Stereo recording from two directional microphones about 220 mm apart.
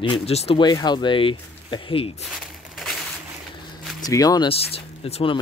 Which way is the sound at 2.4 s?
Centre (ahead or behind).